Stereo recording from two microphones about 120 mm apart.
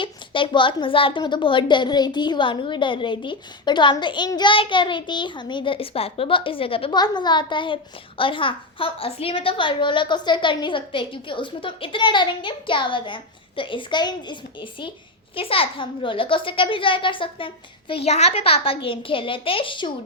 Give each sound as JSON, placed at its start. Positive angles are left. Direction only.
{"t": 0.0, "sound": "a woman's voice", "side_deg": 45}
{"t": 6.9, "sound": "a woman's voice", "side_deg": 35}